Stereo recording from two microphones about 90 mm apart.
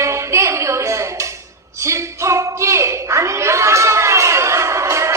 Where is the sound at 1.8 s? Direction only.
30° right (ahead or behind).